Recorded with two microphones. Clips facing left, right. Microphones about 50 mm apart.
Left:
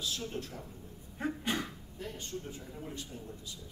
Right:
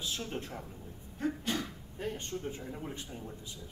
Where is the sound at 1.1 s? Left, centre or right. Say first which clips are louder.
Even; centre.